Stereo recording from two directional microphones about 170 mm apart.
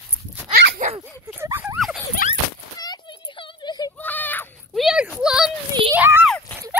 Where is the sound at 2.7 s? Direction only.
25° left (ahead or behind).